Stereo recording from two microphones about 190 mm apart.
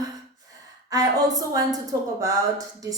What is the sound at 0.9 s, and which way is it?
Speech, 20° right (ahead or behind).